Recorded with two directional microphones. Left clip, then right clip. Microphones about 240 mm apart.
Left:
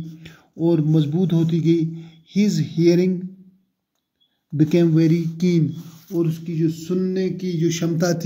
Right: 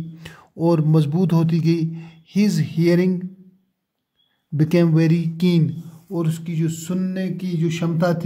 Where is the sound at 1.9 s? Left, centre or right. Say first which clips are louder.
Right 1 dB; right.